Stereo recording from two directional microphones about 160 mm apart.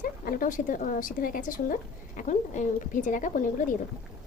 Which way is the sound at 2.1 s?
50° left (ahead or behind).